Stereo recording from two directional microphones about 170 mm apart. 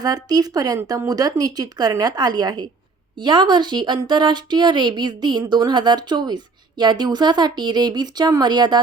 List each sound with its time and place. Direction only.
0.0 s speech: 20° right (ahead or behind)